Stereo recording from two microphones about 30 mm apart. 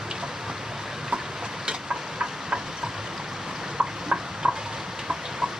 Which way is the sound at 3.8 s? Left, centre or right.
Right.